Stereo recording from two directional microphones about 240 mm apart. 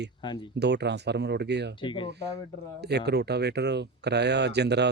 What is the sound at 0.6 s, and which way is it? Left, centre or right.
Speech, right.